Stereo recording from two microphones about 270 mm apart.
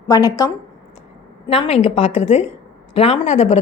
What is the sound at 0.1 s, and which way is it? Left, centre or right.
A woman's voice, centre.